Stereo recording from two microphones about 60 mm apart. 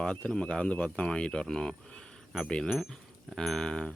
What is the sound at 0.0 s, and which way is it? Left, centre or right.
Wind chime, centre.